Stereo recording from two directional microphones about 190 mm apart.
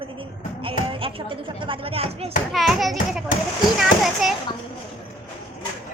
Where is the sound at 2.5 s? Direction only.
Centre (ahead or behind).